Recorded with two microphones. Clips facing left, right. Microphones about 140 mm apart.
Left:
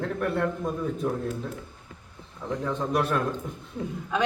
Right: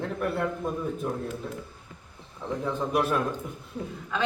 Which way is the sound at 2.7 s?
5° right (ahead or behind).